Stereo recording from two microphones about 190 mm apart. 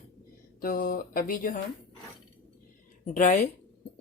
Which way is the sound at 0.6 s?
50° left (ahead or behind).